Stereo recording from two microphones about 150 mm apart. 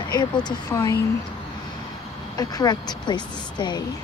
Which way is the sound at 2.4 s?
25° left (ahead or behind).